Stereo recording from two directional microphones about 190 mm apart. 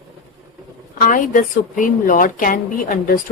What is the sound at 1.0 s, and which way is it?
A woman's voice, 45° left (ahead or behind).